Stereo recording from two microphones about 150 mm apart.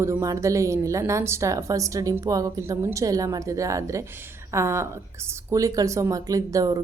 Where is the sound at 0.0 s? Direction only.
20° right (ahead or behind).